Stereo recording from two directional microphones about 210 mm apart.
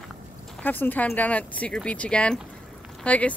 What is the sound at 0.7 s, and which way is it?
Speech, 10° left (ahead or behind).